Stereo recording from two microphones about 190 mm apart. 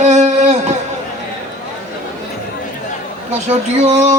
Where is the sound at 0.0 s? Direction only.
40° right (ahead or behind).